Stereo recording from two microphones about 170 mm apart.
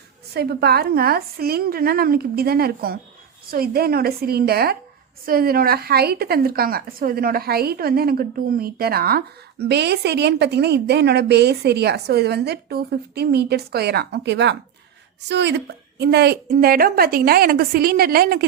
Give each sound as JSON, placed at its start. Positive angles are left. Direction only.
{"t": 0.3, "sound": "a woman's voice", "side_deg": -70}
{"t": 16.5, "sound": "a woman's voice", "side_deg": -60}